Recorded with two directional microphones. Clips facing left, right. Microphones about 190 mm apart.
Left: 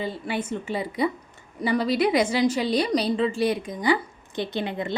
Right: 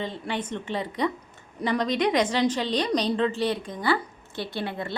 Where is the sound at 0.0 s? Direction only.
10° left (ahead or behind).